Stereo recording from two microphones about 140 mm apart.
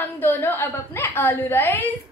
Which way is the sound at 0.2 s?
15° left (ahead or behind).